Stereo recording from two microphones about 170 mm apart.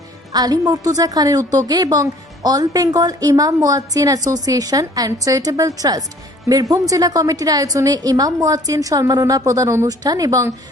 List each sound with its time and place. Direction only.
0.3 s a woman's voice: 20° right (ahead or behind)